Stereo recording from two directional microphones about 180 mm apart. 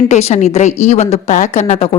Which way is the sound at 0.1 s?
40° left (ahead or behind).